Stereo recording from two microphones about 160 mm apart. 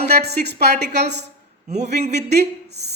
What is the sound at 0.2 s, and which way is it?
Speech, 90° right.